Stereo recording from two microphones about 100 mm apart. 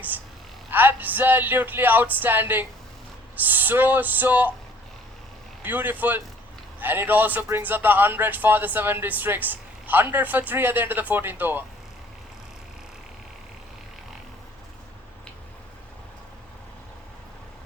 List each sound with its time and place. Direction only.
0.7 s speech: 20° right (ahead or behind)
5.6 s speech: 20° right (ahead or behind)